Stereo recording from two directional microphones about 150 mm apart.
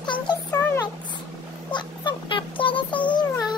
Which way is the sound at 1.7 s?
30° left (ahead or behind).